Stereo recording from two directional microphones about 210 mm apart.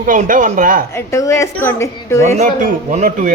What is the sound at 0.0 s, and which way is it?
Speech, 40° right (ahead or behind).